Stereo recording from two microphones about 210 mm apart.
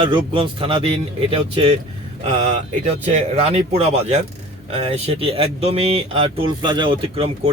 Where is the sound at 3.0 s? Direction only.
30° right (ahead or behind).